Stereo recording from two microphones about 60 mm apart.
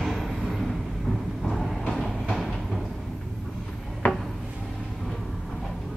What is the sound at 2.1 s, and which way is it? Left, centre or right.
Train, centre.